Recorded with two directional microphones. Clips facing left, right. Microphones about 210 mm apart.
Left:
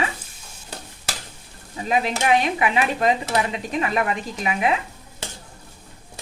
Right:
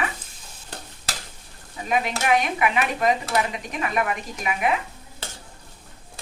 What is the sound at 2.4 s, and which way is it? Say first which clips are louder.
Speech: left 2 dB; 30° left (ahead or behind).